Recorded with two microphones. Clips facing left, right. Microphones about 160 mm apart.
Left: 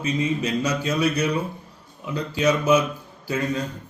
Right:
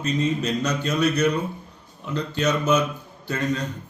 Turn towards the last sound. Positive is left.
turn(degrees=10)  # may be behind; listen again after turning